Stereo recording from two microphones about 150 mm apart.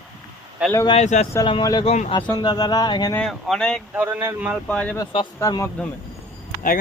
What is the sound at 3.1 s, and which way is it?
Speech, 5° left (ahead or behind).